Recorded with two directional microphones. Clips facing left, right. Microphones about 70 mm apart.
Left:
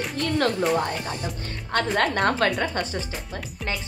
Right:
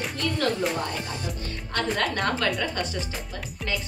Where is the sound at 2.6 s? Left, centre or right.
Left.